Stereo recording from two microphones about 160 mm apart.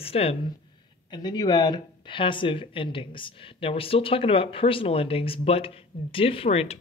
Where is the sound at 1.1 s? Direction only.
25° left (ahead or behind).